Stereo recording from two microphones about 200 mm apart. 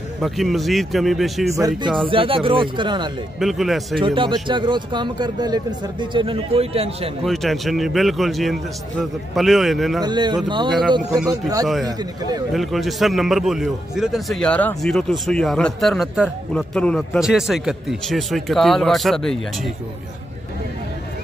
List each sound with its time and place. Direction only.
0.2 s a man's voice: centre (ahead or behind)
1.5 s speech: 20° right (ahead or behind)
3.3 s a man's voice: centre (ahead or behind)
4.0 s speech: 25° right (ahead or behind)
7.2 s a man's voice: centre (ahead or behind)
10.0 s speech: 20° right (ahead or behind)
11.6 s a man's voice: centre (ahead or behind)